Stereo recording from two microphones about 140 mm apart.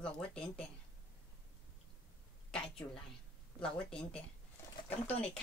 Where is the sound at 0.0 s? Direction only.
5° left (ahead or behind).